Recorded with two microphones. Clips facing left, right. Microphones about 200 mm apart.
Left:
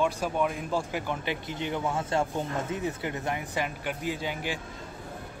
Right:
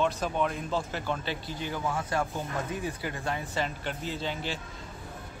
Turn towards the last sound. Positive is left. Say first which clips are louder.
# left 1 dB
turn(degrees=10)  # may be behind; listen again after turning